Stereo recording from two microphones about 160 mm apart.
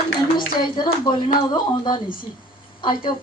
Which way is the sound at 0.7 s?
30° left (ahead or behind).